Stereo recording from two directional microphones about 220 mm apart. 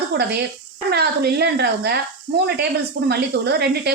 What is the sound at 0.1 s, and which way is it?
Speech, 50° right (ahead or behind).